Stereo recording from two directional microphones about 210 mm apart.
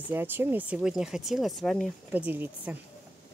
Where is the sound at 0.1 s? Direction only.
10° right (ahead or behind).